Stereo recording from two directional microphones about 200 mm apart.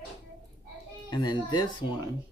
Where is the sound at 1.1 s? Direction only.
20° left (ahead or behind).